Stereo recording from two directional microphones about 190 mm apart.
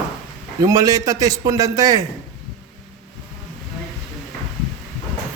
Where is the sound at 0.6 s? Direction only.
20° right (ahead or behind).